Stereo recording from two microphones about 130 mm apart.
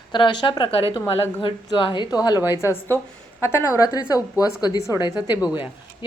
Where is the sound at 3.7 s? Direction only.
30° left (ahead or behind).